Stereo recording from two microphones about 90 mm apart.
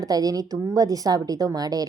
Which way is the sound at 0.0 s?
45° right (ahead or behind).